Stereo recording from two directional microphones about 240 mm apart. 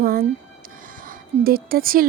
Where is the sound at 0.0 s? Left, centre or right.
Right.